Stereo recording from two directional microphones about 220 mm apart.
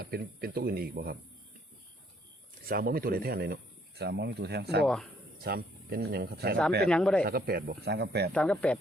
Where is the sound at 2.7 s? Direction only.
40° right (ahead or behind).